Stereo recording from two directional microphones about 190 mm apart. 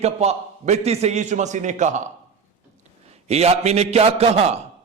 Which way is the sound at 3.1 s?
35° right (ahead or behind).